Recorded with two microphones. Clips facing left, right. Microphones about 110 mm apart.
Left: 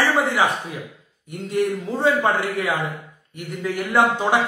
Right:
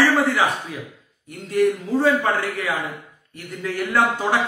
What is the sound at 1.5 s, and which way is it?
A man's voice, 20° left (ahead or behind).